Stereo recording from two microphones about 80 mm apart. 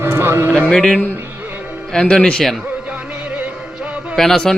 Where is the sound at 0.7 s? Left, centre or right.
Centre.